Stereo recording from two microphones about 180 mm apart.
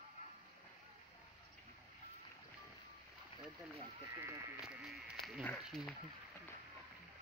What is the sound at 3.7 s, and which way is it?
Speech, 15° right (ahead or behind).